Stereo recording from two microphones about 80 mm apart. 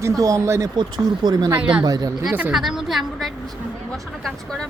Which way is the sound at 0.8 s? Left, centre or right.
Right.